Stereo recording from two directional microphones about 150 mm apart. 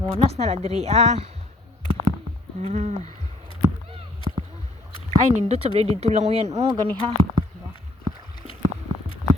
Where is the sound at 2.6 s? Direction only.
50° right (ahead or behind).